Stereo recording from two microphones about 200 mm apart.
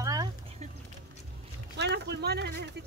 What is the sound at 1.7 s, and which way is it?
Speech, 60° right (ahead or behind).